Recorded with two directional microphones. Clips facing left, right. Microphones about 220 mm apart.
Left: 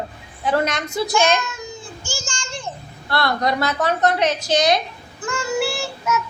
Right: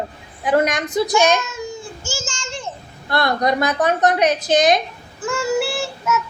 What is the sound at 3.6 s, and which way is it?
Speech, 15° right (ahead or behind).